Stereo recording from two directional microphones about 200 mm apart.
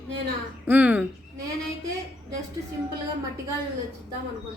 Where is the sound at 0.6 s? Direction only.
10° right (ahead or behind).